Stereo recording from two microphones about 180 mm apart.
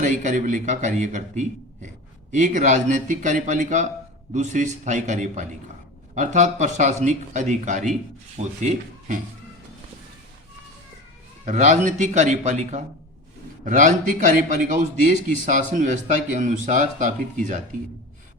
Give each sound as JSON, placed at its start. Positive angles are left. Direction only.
{"t": 0.0, "sound": "a man's voice", "side_deg": -45}
{"t": 11.4, "sound": "a man's voice", "side_deg": -40}